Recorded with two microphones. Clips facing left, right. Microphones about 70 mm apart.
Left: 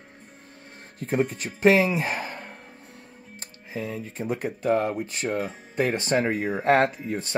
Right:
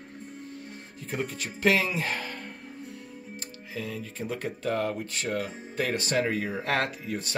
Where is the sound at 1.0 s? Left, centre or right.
Left.